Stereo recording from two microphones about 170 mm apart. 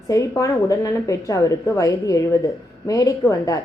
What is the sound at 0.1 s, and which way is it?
A woman's voice, 20° left (ahead or behind).